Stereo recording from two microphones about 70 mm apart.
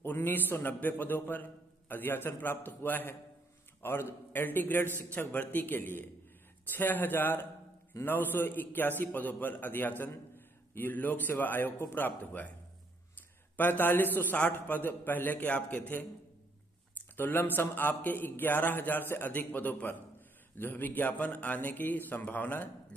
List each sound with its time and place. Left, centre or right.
0.0 s a man's voice: left
13.6 s a man's voice: left
17.2 s a man's voice: left